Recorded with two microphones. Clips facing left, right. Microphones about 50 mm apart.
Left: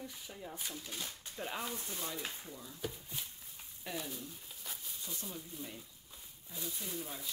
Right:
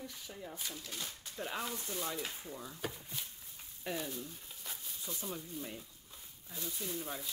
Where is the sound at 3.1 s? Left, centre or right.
Centre.